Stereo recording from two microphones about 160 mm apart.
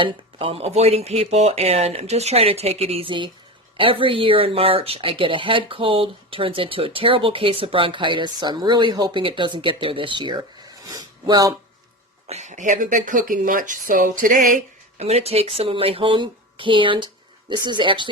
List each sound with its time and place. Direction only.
0.0 s speech: 35° right (ahead or behind)
12.3 s speech: 45° right (ahead or behind); by 18.1 s 30° right (ahead or behind)